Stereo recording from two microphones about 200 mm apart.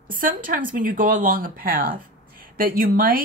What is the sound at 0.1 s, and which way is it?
Speech, 45° right (ahead or behind).